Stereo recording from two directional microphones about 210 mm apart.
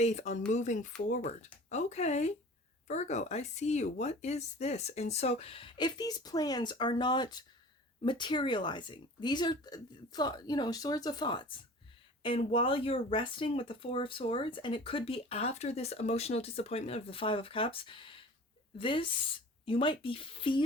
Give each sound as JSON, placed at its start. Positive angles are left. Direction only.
{"t": 0.0, "sound": "speech", "side_deg": 35}